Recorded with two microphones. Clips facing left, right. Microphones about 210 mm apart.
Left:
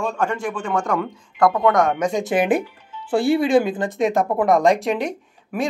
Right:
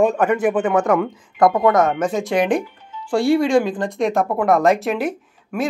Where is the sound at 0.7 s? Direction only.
5° right (ahead or behind).